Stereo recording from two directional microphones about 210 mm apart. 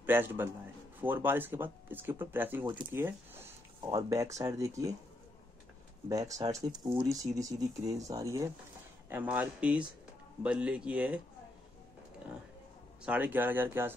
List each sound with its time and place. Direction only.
0.0 s a man's voice: 10° right (ahead or behind)
6.0 s speech: 15° right (ahead or behind)
13.0 s speech: 5° right (ahead or behind)